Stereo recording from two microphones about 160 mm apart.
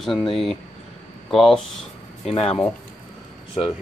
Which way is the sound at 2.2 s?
35° left (ahead or behind).